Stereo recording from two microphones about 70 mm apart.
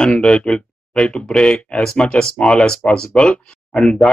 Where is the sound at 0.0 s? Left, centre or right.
Centre.